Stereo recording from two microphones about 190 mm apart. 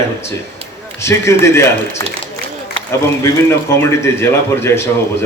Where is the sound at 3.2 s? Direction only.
15° left (ahead or behind).